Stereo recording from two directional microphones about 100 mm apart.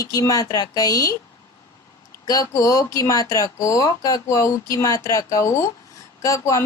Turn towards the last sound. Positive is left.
turn(degrees=35)  # may be behind; listen again after turning